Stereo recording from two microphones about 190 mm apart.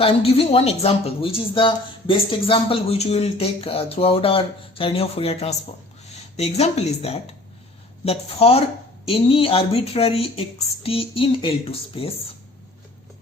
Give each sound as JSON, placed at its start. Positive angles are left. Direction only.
{"t": 0.0, "sound": "speech", "side_deg": 30}